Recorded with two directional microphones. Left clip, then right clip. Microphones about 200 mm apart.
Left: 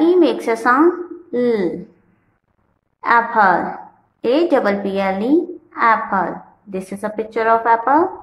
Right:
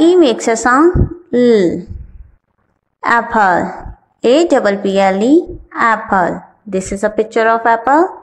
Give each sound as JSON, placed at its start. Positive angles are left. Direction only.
{"t": 0.0, "sound": "a woman's voice", "side_deg": -35}
{"t": 3.0, "sound": "a woman's voice", "side_deg": -30}